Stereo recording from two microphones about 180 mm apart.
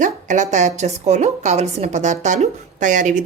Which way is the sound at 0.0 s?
40° right (ahead or behind).